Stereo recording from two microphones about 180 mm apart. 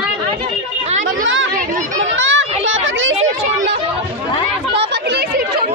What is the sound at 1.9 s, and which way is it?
Children playing, 90° right.